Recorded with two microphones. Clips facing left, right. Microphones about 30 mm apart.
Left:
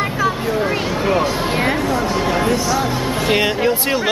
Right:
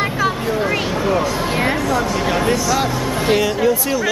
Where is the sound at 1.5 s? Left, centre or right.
Centre.